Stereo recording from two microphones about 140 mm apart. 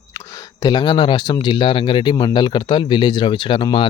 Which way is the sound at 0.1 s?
25° left (ahead or behind).